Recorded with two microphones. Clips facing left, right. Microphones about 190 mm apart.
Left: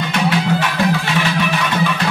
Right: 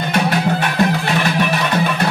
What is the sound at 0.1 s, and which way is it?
Music, 55° right (ahead or behind).